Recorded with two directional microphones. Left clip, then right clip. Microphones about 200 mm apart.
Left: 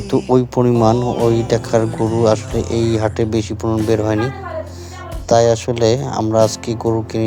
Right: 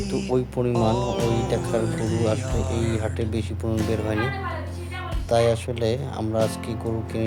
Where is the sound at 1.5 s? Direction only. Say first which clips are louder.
Left 9 dB; 35° left (ahead or behind).